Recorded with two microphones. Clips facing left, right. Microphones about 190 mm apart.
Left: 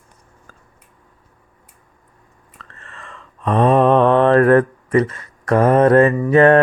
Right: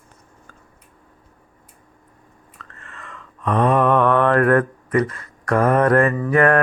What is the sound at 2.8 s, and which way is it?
Mantra, 30° left (ahead or behind).